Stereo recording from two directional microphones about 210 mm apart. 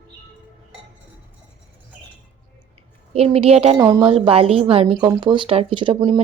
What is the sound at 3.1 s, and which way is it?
A woman's voice, 30° right (ahead or behind).